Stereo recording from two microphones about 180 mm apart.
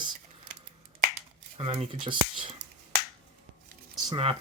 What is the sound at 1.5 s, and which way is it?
Speech, 30° right (ahead or behind).